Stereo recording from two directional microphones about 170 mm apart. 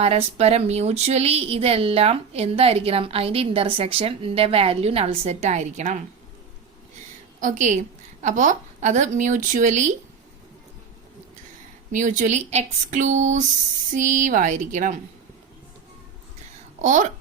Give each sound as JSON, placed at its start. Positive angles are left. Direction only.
{"t": 0.0, "sound": "a woman's voice", "side_deg": -40}
{"t": 7.4, "sound": "a woman's voice", "side_deg": -50}
{"t": 11.9, "sound": "a woman's voice", "side_deg": -50}
{"t": 16.8, "sound": "a woman's voice", "side_deg": -45}